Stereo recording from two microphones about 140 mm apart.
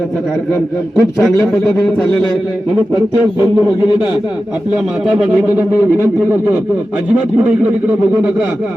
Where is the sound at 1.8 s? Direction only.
5° left (ahead or behind).